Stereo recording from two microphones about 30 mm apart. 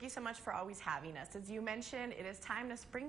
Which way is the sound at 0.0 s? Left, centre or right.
Centre.